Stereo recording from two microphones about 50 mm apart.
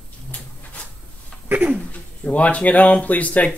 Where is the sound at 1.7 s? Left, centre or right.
Left.